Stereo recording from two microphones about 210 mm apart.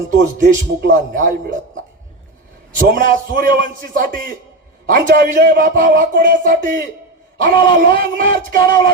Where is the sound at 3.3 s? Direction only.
40° right (ahead or behind).